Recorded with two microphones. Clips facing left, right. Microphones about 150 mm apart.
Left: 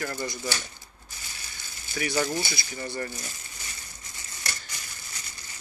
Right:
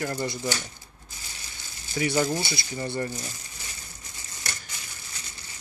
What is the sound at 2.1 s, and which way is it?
Speech, 10° right (ahead or behind).